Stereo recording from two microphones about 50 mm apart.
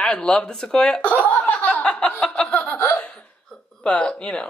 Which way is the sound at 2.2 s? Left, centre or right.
Centre.